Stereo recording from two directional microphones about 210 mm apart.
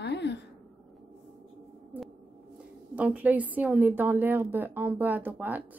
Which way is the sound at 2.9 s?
5° right (ahead or behind).